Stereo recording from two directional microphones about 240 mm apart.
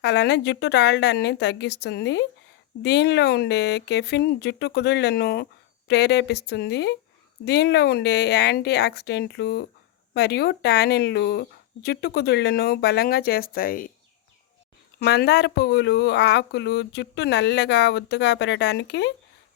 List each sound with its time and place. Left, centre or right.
0.0 s speech: left
14.9 s speech: left